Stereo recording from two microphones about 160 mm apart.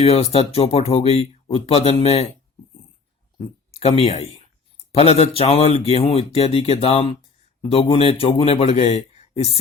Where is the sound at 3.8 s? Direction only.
40° left (ahead or behind).